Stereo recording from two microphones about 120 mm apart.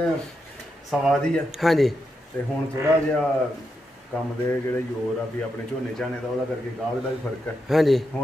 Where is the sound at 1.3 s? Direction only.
Centre (ahead or behind).